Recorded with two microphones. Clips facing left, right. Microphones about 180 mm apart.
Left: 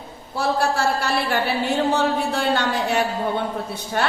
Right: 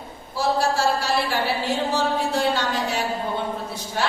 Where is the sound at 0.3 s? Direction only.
60° left (ahead or behind).